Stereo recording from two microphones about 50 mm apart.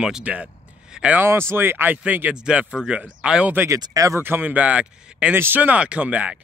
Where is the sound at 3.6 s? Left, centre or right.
Right.